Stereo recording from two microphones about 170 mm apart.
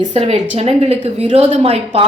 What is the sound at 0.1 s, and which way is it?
A woman's voice, 40° right (ahead or behind).